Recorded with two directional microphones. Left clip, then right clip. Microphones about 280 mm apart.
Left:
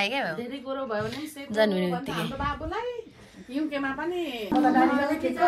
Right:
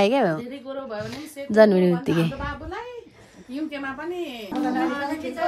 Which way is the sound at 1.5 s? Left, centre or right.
Right.